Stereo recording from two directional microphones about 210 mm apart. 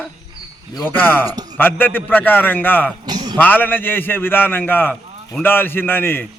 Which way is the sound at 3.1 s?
20° right (ahead or behind).